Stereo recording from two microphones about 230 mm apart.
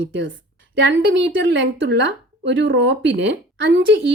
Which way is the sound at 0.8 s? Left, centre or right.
Right.